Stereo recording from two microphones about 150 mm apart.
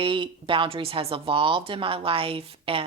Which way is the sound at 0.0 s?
35° right (ahead or behind).